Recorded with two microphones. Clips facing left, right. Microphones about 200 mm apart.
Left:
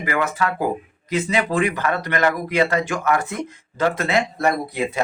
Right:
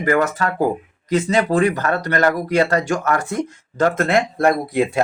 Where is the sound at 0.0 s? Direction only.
45° right (ahead or behind).